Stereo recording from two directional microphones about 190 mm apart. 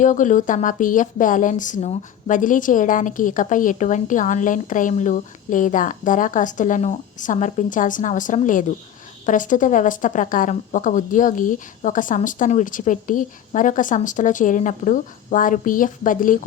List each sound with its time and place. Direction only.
0.0 s speech: 40° left (ahead or behind)